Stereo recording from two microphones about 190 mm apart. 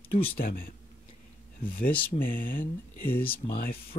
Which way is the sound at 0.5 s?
50° left (ahead or behind).